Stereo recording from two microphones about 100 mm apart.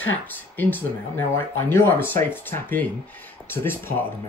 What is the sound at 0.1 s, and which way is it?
Speech, 20° left (ahead or behind).